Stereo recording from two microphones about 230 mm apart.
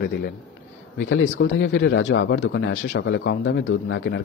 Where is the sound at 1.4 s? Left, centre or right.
Left.